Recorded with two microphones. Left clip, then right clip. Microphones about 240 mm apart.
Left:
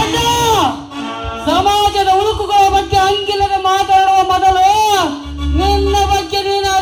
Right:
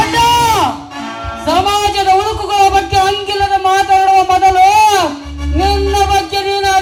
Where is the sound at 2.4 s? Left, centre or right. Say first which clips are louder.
Right 1 dB; right.